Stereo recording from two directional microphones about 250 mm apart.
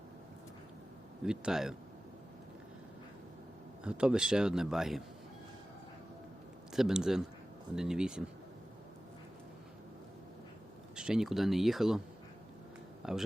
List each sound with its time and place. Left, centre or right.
1.2 s speech: centre
3.8 s speech: centre
6.7 s speech: centre
10.9 s speech: centre
13.0 s speech: centre